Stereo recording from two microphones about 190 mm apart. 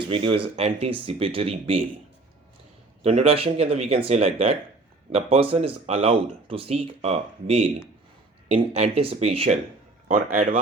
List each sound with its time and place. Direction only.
0.1 s speech: 30° right (ahead or behind)
3.0 s speech: 30° right (ahead or behind)
10.1 s a man's voice: 45° right (ahead or behind)